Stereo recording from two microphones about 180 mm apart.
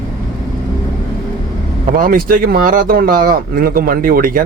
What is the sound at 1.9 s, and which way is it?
Speech, 50° right (ahead or behind).